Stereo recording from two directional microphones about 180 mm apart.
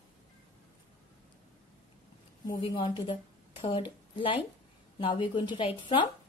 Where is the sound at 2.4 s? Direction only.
25° left (ahead or behind).